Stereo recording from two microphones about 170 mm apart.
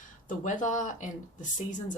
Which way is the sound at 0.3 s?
50° left (ahead or behind).